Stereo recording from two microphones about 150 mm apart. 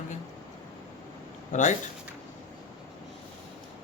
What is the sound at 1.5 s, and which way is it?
Speech, 55° left (ahead or behind).